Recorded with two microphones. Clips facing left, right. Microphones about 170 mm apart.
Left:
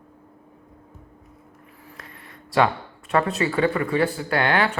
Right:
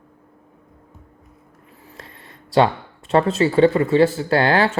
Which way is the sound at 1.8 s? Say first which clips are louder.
Right 2 dB; 30° right (ahead or behind).